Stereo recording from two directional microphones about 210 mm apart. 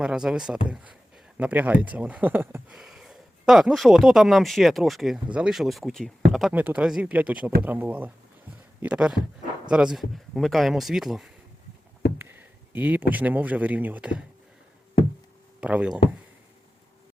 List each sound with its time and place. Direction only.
0.0 s speech: 5° right (ahead or behind)
15.6 s speech: 5° right (ahead or behind)